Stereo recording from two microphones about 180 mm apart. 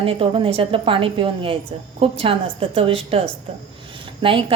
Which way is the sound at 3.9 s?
30° right (ahead or behind).